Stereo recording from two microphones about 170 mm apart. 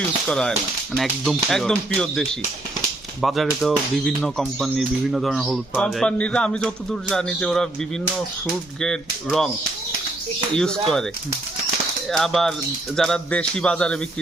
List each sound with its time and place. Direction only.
0.3 s speech: 5° left (ahead or behind)
8.8 s speech: 5° left (ahead or behind)
10.5 s speech: 5° left (ahead or behind)
12.1 s speech: centre (ahead or behind)